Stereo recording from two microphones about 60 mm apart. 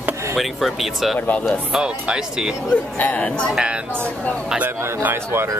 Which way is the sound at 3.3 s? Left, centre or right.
Centre.